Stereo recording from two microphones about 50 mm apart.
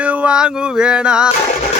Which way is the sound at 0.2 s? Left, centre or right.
Centre.